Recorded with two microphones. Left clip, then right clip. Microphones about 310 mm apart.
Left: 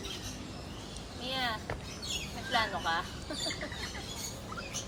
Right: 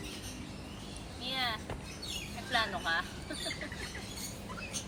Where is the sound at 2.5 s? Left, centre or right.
Centre.